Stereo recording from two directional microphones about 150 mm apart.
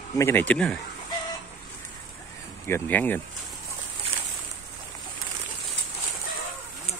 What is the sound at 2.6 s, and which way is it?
Speech, 15° left (ahead or behind).